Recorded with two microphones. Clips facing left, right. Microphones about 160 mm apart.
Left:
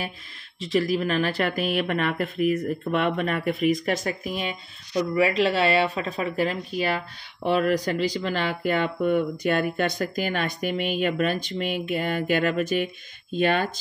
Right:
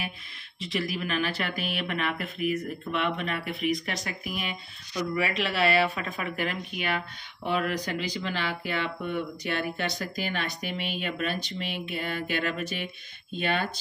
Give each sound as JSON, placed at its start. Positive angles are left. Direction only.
{"t": 0.6, "sound": "speech", "side_deg": 40}
{"t": 4.3, "sound": "speech", "side_deg": 35}